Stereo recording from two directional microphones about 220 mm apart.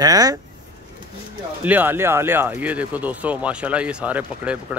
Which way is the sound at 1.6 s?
10° right (ahead or behind).